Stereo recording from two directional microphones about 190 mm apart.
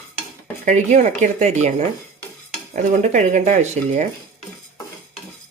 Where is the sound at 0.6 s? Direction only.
40° right (ahead or behind).